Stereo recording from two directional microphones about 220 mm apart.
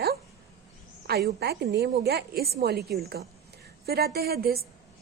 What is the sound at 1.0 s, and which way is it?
A woman's voice, 45° right (ahead or behind).